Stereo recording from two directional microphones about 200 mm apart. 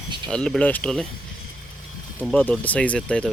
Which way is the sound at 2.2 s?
10° left (ahead or behind).